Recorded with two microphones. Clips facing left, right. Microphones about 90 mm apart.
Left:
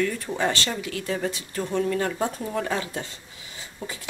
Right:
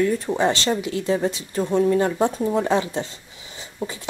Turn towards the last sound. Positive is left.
turn(degrees=-25)  # may be behind; listen again after turning